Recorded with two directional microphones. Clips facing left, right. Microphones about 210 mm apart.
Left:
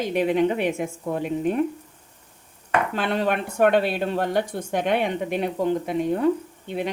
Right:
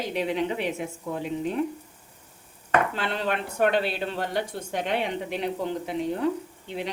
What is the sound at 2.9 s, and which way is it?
Speech, 55° left (ahead or behind).